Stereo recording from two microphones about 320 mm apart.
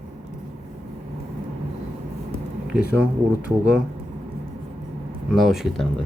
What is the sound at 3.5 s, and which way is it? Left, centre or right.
Speech, centre.